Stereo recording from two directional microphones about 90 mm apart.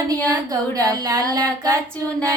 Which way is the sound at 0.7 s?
40° right (ahead or behind).